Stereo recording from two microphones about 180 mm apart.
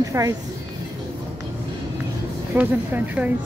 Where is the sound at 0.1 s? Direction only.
15° right (ahead or behind).